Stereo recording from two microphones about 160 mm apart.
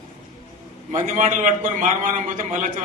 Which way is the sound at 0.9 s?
50° right (ahead or behind).